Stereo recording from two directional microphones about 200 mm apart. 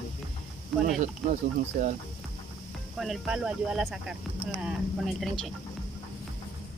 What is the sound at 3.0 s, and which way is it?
Speech, centre (ahead or behind).